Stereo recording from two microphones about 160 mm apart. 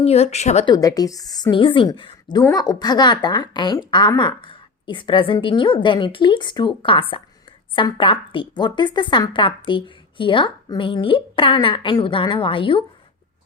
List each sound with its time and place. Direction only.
0.0 s speech: 40° left (ahead or behind)
0.6 s a woman's voice: 25° left (ahead or behind)